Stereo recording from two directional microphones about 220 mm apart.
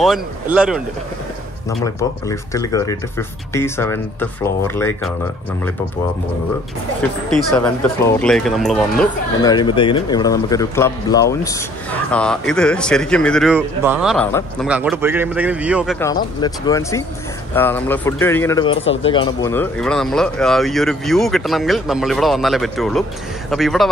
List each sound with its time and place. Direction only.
0.0 s speech: 5° right (ahead or behind)
1.9 s a man's voice: 15° left (ahead or behind)
7.2 s speech: 5° left (ahead or behind)
9.4 s a man's voice: 20° left (ahead or behind); by 14.1 s 5° right (ahead or behind)
14.1 s speech: 5° left (ahead or behind)
14.7 s a man's voice: 5° right (ahead or behind)
16.3 s a man's voice: 15° left (ahead or behind)
19.0 s speech: 20° left (ahead or behind)
19.5 s speech: 5° left (ahead or behind)